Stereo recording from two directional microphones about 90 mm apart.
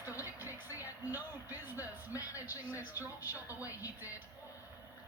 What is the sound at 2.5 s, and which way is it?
Speech, 20° right (ahead or behind).